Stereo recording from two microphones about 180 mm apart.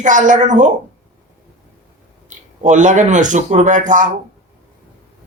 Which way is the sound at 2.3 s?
45° right (ahead or behind).